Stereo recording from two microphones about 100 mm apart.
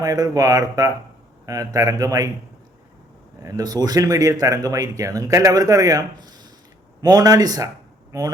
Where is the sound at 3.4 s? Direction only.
40° right (ahead or behind).